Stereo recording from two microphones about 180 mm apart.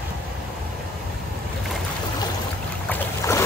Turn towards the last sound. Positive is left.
turn(degrees=15)  # may be behind; listen again after turning